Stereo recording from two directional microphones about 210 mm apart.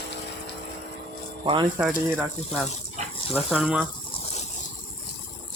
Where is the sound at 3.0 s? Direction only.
35° right (ahead or behind).